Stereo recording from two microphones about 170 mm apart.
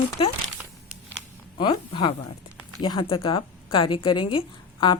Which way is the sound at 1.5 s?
30° left (ahead or behind).